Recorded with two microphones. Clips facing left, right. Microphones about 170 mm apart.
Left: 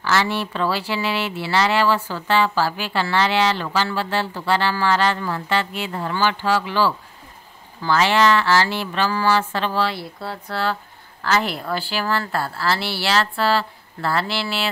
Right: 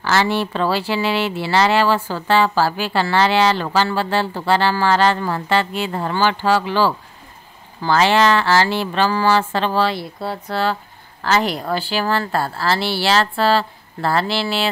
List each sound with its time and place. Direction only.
0.0 s a woman's voice: 30° right (ahead or behind)
9.9 s speech: 20° right (ahead or behind)
12.3 s a woman's voice: 40° right (ahead or behind)